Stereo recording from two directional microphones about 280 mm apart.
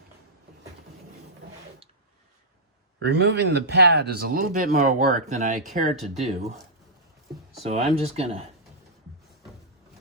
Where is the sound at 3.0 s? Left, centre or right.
Right.